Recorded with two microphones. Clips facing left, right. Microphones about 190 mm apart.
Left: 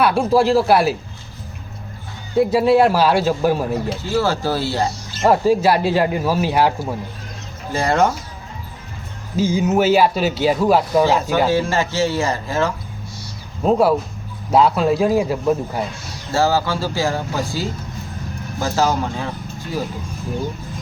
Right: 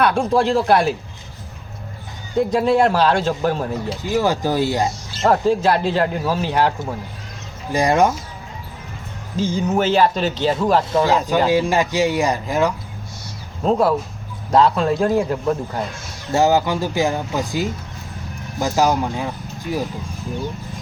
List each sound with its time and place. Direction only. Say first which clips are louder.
0.0 s a man's voice: left 2 dB; 5° left (ahead or behind)
2.4 s speech: left 2 dB; 5° left (ahead or behind)
4.0 s speech: right 2 dB; 15° right (ahead or behind)
5.2 s speech: left 2 dB; 10° left (ahead or behind)
7.7 s speech: right 1 dB; 15° right (ahead or behind)
9.3 s speech: left 3 dB; 10° left (ahead or behind)
11.4 s speech: right 1 dB; 15° right (ahead or behind)
13.7 s a man's voice: left 2 dB; 10° left (ahead or behind)
16.3 s speech: right 2 dB; 20° right (ahead or behind)